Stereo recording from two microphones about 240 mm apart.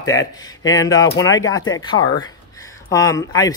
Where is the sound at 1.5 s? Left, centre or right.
Left.